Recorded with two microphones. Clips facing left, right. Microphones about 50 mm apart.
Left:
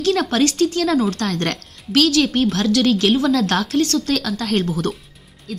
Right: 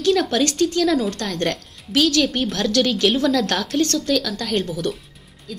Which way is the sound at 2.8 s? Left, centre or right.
Left.